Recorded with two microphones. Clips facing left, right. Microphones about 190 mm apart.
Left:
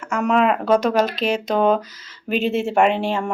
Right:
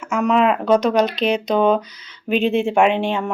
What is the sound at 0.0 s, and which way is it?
Speech, centre (ahead or behind).